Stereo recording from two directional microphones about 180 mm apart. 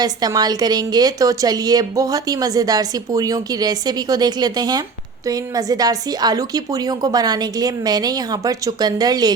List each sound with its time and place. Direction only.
0.0 s a woman's voice: 20° right (ahead or behind)